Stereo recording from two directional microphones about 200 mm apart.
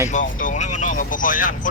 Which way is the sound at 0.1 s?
40° left (ahead or behind).